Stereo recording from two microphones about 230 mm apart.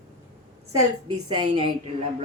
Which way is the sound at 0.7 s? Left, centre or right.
Centre.